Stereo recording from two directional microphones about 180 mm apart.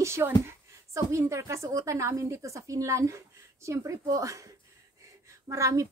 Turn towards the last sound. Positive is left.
turn(degrees=-15)  # may be behind; listen again after turning